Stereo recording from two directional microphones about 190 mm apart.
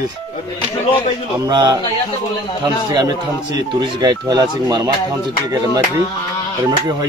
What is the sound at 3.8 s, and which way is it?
Speech, 20° right (ahead or behind).